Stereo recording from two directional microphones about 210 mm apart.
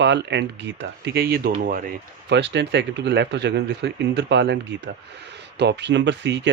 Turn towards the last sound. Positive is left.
turn(degrees=-60)  # may be behind; listen again after turning